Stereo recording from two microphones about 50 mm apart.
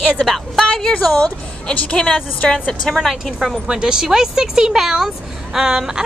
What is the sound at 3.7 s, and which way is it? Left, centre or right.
A woman's voice, centre.